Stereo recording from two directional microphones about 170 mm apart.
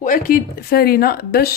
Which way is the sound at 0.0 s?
55° left (ahead or behind).